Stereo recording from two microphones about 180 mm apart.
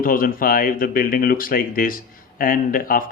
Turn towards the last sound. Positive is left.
turn(degrees=50)  # may be behind; listen again after turning